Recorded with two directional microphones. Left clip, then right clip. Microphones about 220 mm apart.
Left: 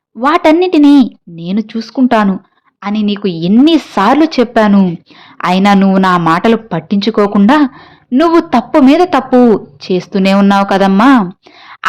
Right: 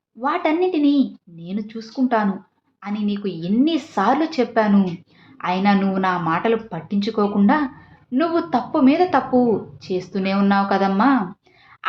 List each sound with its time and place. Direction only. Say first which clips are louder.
0.2 s a woman's voice: left 11 dB; 50° left (ahead or behind)